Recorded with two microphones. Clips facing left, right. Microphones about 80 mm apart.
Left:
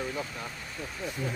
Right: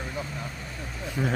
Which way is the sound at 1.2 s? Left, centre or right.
Right.